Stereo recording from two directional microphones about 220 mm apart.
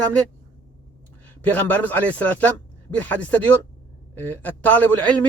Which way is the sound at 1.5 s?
10° left (ahead or behind).